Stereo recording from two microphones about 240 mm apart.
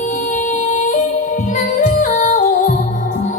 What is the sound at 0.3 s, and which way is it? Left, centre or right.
Yodeling, left.